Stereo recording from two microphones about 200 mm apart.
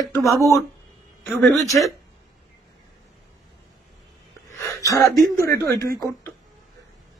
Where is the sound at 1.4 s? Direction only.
Centre (ahead or behind).